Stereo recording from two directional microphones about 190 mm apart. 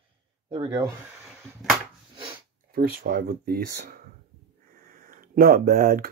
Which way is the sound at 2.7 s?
55° right (ahead or behind).